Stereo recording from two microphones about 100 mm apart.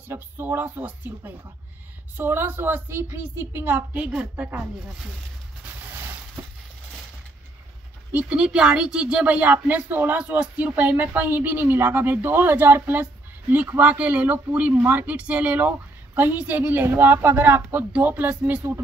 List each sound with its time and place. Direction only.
0.1 s a woman's voice: 20° right (ahead or behind)
8.1 s a woman's voice: 15° right (ahead or behind)